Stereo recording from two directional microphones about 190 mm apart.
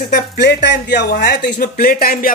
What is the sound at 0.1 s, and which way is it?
Speech, 60° left (ahead or behind).